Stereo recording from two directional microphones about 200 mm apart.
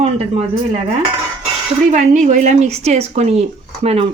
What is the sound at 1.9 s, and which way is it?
Speech, 35° right (ahead or behind).